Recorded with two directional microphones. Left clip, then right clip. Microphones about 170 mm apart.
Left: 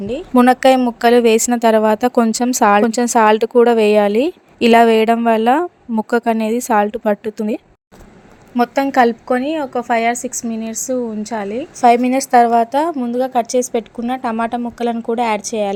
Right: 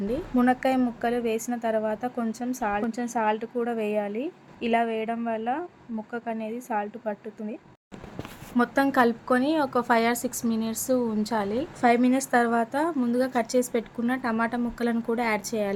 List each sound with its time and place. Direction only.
0.3 s speech: 60° left (ahead or behind)
1.0 s a woman's voice: 70° left (ahead or behind); by 7.6 s 90° left
8.5 s a woman's voice: 35° left (ahead or behind)
11.8 s a woman's voice: 35° left (ahead or behind)